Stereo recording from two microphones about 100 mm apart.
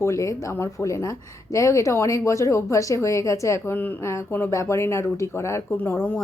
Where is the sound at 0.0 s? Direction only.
30° left (ahead or behind).